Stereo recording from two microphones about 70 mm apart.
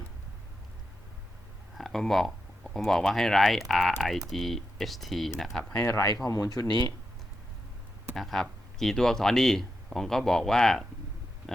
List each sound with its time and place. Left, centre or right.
1.7 s speech: centre
5.8 s speech: left
6.5 s speech: left
8.1 s speech: centre